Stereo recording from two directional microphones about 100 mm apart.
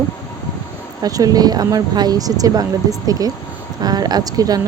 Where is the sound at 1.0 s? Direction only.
35° right (ahead or behind).